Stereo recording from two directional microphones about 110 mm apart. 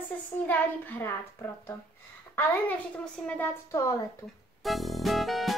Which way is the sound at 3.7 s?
30° left (ahead or behind).